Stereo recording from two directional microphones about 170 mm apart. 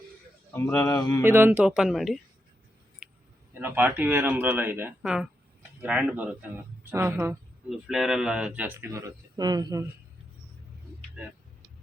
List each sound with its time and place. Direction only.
0.5 s speech: 20° left (ahead or behind)
1.2 s speech: 10° right (ahead or behind)
3.0 s a sound: 5° right (ahead or behind)
3.5 s speech: 10° right (ahead or behind)
7.7 s speech: centre (ahead or behind); by 9.8 s 25° right (ahead or behind)